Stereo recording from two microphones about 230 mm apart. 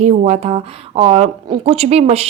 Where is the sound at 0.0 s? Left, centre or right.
Right.